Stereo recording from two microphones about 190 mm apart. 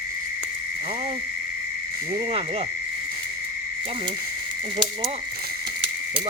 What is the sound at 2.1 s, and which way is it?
Speech, 30° right (ahead or behind).